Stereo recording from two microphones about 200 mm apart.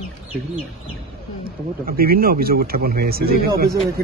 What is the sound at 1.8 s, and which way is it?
Speech, 45° right (ahead or behind).